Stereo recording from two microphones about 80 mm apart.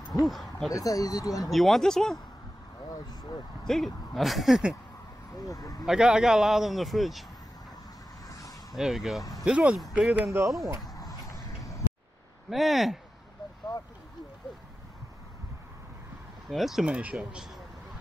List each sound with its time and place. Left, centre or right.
0.2 s a man's voice: centre
0.7 s speech: left
1.5 s a man's voice: centre
3.1 s speech: left
3.6 s a man's voice: centre
5.4 s speech: left
5.9 s a man's voice: centre
8.3 s vehicle: left
8.7 s a man's voice: centre
11.0 s a sound: left
12.4 s a man's voice: centre
16.4 s speech: centre